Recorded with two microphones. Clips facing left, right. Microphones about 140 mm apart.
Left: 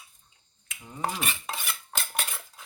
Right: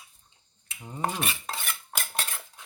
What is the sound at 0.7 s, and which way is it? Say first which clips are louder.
Rub: right 3 dB; 30° right (ahead or behind).